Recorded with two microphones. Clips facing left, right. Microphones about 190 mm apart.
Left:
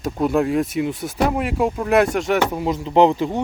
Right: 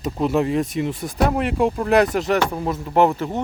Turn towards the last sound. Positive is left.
turn(degrees=15)  # may be behind; listen again after turning